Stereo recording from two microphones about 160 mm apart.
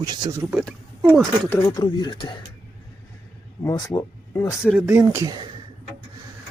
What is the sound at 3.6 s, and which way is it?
Speech, 25° left (ahead or behind).